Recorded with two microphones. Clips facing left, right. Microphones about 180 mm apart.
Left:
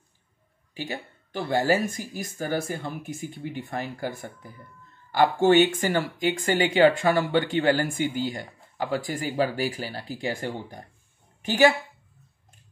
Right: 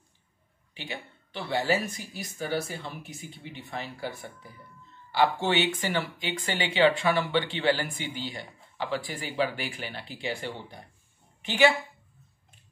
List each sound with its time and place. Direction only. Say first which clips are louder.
0.7 s speech: left 5 dB; 45° left (ahead or behind)